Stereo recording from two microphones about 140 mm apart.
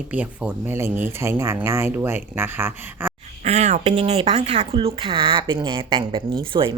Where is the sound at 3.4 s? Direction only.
50° right (ahead or behind).